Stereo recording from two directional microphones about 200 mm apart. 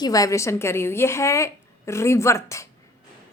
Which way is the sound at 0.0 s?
15° left (ahead or behind).